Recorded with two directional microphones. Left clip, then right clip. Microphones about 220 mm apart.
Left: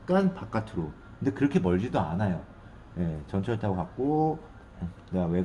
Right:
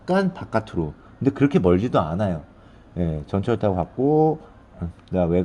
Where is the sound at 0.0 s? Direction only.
50° right (ahead or behind).